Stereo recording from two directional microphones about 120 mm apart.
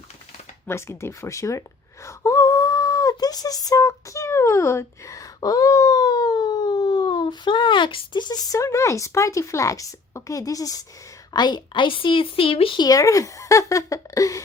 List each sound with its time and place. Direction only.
0.7 s a woman's voice: 20° left (ahead or behind); by 12.8 s 50° left (ahead or behind)
12.8 s speech: 30° left (ahead or behind)